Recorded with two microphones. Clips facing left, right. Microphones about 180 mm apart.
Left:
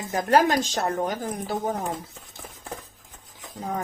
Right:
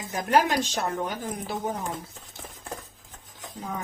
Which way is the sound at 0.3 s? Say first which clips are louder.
Left 2 dB; 40° left (ahead or behind).